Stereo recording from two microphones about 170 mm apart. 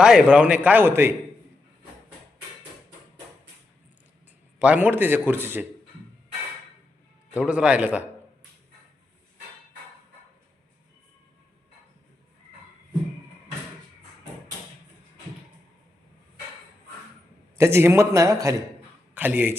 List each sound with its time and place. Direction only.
0.0 s a man's voice: 5° right (ahead or behind)
4.6 s a man's voice: 10° right (ahead or behind)
7.3 s a man's voice: 5° right (ahead or behind)
17.6 s a man's voice: 15° right (ahead or behind)